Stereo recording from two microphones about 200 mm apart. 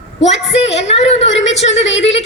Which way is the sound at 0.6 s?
30° left (ahead or behind).